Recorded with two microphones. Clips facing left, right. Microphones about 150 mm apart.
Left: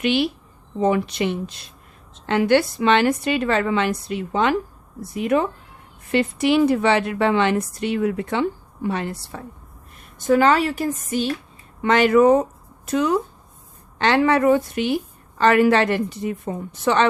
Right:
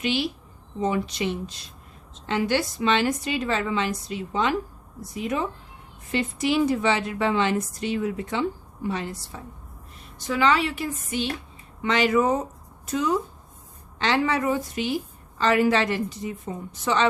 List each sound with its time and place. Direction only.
0.0 s a woman's voice: 60° left (ahead or behind)
10.2 s a woman's voice: 50° left (ahead or behind)
11.8 s a woman's voice: 55° left (ahead or behind)